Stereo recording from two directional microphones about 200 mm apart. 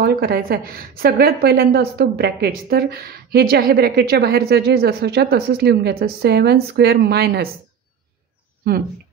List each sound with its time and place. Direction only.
0.0 s a woman's voice: 50° right (ahead or behind)
8.6 s speech: 50° right (ahead or behind)